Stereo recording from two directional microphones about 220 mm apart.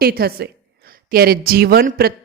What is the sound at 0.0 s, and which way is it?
A woman's voice, 45° right (ahead or behind).